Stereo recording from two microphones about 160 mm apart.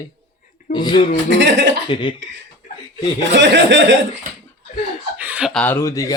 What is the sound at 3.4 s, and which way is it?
Speech, 90° right.